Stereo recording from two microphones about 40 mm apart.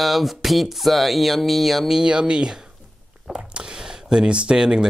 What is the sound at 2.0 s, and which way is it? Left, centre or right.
Speech, centre.